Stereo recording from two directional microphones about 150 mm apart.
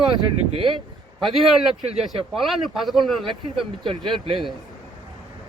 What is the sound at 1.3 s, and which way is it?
Speech, centre (ahead or behind).